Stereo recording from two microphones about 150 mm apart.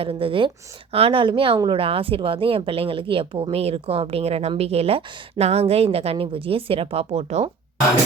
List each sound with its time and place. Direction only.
0.0 s speech: 40° right (ahead or behind)